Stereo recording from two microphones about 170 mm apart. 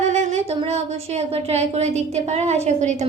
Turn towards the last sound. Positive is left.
turn(degrees=-40)  # may be behind; listen again after turning